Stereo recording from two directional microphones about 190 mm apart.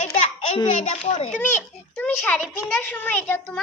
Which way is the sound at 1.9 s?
10° left (ahead or behind).